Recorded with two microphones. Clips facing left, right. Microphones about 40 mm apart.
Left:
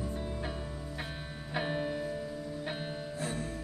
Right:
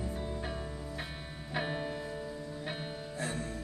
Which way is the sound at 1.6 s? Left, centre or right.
Centre.